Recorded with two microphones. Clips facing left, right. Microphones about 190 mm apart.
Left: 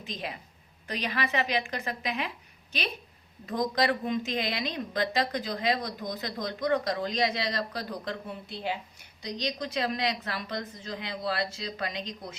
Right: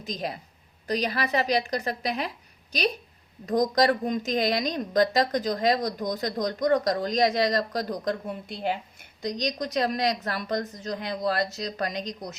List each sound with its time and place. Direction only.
0.0 s a woman's voice: 40° right (ahead or behind)
3.4 s a woman's voice: 40° right (ahead or behind)